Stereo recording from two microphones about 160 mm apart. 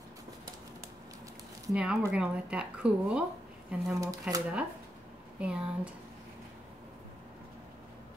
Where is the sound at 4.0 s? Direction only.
20° right (ahead or behind).